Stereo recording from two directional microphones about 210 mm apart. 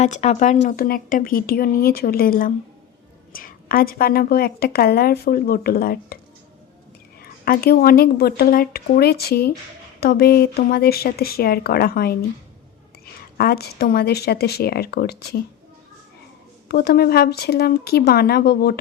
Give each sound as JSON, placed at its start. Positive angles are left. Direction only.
{"t": 0.0, "sound": "a woman's voice", "side_deg": 35}
{"t": 7.2, "sound": "a woman's voice", "side_deg": 45}
{"t": 13.3, "sound": "a woman's voice", "side_deg": 45}
{"t": 16.6, "sound": "a woman's voice", "side_deg": 50}